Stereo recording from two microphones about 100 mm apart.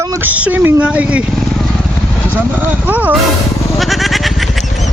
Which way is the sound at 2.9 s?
15° right (ahead or behind).